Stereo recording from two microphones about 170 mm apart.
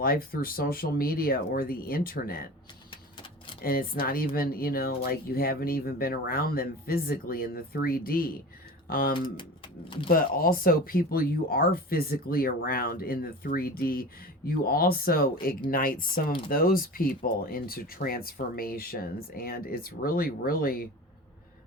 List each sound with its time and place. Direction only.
0.0 s speech: 60° left (ahead or behind)
3.6 s speech: 60° left (ahead or behind)